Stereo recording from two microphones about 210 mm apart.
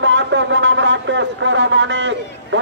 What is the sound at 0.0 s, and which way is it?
Speech, 60° right (ahead or behind).